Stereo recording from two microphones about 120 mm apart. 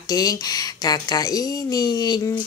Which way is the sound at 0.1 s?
30° left (ahead or behind).